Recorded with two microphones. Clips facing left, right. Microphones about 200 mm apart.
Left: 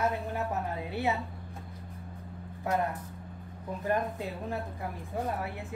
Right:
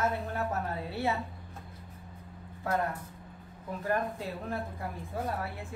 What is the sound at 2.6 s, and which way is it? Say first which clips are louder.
Speech: left 1 dB; 20° left (ahead or behind).